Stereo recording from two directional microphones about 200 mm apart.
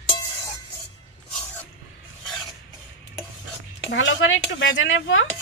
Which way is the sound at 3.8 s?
65° left (ahead or behind).